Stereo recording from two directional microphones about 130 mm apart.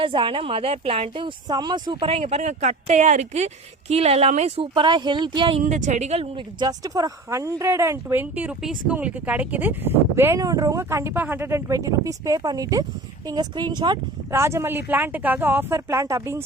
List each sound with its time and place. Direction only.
0.0 s a woman's voice: 40° right (ahead or behind)
4.7 s speech: 35° right (ahead or behind)
5.6 s speech: 65° right (ahead or behind)
6.3 s speech: 30° right (ahead or behind)
14.3 s speech: 20° right (ahead or behind)